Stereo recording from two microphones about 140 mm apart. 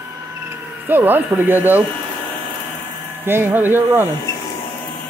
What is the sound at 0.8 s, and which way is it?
Speech, 15° right (ahead or behind).